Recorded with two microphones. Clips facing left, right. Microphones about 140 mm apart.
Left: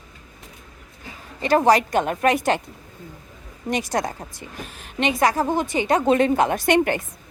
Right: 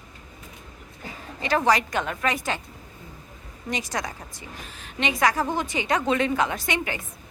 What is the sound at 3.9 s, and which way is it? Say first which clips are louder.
Speech: left 7 dB; 45° left (ahead or behind).